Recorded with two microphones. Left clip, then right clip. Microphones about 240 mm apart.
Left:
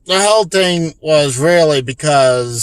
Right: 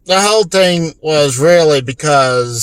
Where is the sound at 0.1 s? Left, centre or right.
Centre.